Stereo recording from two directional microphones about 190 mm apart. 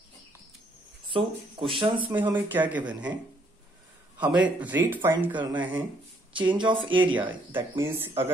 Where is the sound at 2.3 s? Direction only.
10° right (ahead or behind).